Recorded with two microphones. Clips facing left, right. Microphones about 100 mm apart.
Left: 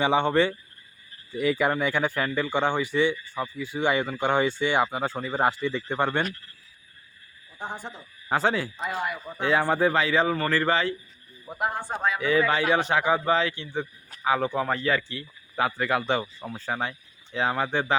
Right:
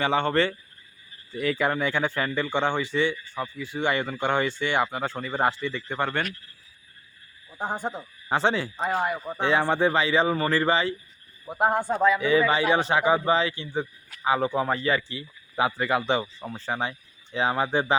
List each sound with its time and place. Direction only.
0.0 s speech: 15° left (ahead or behind)
7.6 s speech: 45° right (ahead or behind)
8.3 s speech: centre (ahead or behind)
8.9 s speech: 35° right (ahead or behind)
9.4 s speech: centre (ahead or behind)
12.2 s speech: centre (ahead or behind)